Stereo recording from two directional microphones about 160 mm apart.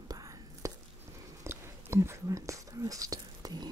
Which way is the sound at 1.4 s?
15° right (ahead or behind).